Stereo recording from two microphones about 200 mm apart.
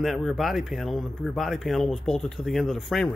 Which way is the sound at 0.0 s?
Centre (ahead or behind).